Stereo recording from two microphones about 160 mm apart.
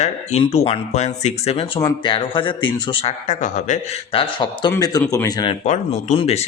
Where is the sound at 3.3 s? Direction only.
50° left (ahead or behind).